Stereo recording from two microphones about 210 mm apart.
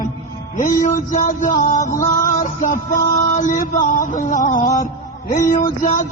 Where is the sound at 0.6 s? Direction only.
40° left (ahead or behind).